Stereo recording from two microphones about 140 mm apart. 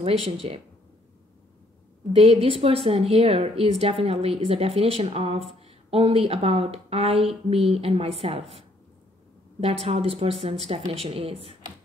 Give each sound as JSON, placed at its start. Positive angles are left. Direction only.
{"t": 0.0, "sound": "a woman's voice", "side_deg": -45}
{"t": 2.1, "sound": "a woman's voice", "side_deg": -45}